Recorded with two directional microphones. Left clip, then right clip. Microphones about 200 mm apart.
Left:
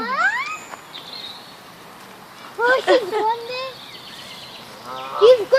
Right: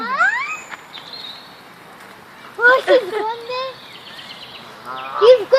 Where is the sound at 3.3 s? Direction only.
25° right (ahead or behind).